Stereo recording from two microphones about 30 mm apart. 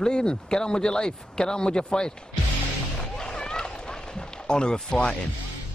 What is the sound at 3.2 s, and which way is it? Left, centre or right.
Run, left.